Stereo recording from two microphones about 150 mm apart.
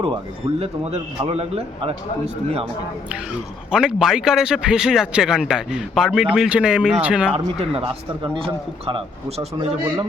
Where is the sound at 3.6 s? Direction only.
5° right (ahead or behind).